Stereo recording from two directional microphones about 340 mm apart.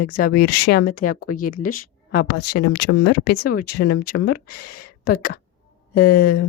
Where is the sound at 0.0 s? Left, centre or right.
Left.